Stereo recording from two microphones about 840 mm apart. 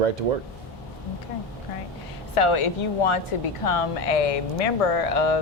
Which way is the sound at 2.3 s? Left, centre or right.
Left.